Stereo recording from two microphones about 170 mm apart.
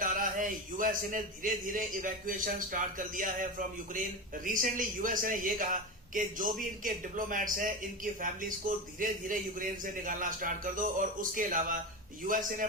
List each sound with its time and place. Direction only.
0.0 s a man's voice: 50° right (ahead or behind)